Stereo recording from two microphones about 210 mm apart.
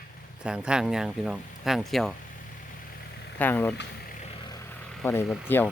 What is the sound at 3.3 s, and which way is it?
Speech, 10° left (ahead or behind).